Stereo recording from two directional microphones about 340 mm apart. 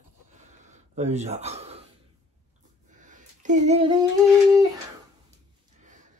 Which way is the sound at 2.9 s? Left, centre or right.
Right.